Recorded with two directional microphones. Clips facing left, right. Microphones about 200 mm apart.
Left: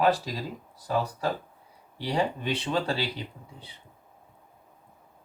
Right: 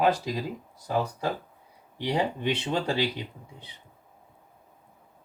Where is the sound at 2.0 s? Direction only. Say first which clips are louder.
Right 1 dB; 15° right (ahead or behind).